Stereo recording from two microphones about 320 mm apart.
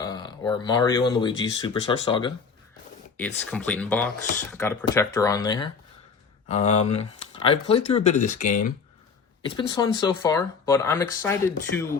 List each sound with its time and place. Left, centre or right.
0.0 s speech: centre
3.2 s speech: centre; by 8.7 s left
9.4 s speech: centre